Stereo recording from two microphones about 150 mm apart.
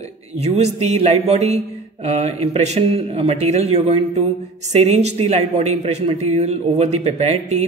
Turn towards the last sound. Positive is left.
turn(degrees=-45)  # may be behind; listen again after turning